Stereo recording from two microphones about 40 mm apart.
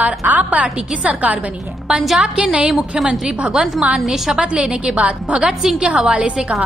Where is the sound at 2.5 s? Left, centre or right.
Right.